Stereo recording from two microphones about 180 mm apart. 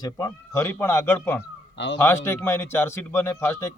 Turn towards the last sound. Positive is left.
turn(degrees=15)  # may be behind; listen again after turning